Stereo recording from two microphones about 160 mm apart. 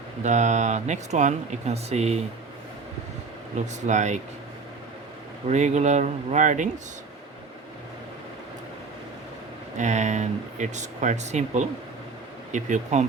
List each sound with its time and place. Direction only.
0.2 s speech: 45° right (ahead or behind)
3.8 s speech: 45° right (ahead or behind)
5.5 s speech: 45° right (ahead or behind)
9.7 s speech: 50° right (ahead or behind)